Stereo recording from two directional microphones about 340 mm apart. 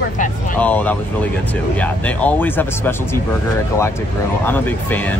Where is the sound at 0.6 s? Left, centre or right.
Centre.